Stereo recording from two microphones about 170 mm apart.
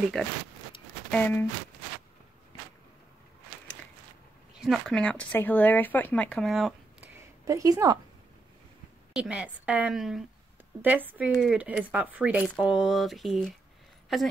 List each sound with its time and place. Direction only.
0.2 s speech: centre (ahead or behind)
4.6 s speech: centre (ahead or behind)
7.2 s a sound: 20° right (ahead or behind)
9.1 s a woman's voice: 5° right (ahead or behind)